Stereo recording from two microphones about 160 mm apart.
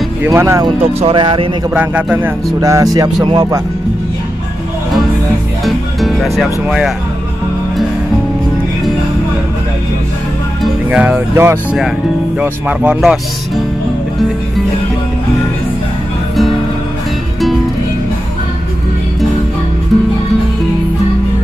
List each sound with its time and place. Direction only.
0.2 s speech: 20° right (ahead or behind)
0.7 s speech: 30° right (ahead or behind)
1.7 s speech: 10° right (ahead or behind)
2.6 s speech: 20° right (ahead or behind)
5.7 s music: centre (ahead or behind)
10.6 s speech: 10° right (ahead or behind)